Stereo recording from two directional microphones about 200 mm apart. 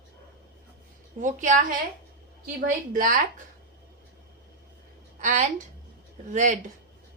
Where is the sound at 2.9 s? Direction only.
40° right (ahead or behind).